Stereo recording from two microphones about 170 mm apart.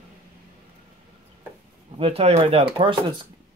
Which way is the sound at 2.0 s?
35° right (ahead or behind).